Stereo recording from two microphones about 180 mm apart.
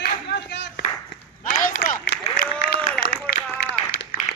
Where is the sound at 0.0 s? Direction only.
75° left (ahead or behind).